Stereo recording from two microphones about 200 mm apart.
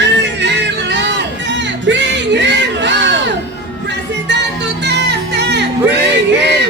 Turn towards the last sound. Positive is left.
turn(degrees=-60)  # may be behind; listen again after turning